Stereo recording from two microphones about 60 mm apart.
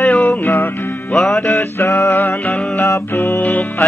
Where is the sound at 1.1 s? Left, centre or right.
Centre.